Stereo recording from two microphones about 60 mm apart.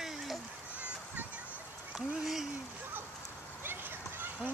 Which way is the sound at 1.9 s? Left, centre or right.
Centre.